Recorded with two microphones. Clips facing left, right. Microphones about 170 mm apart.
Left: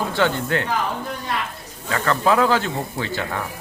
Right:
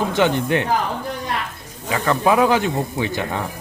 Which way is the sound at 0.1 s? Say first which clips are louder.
Right 3 dB; 15° right (ahead or behind).